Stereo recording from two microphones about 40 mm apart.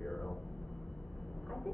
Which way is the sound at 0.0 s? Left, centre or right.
Centre.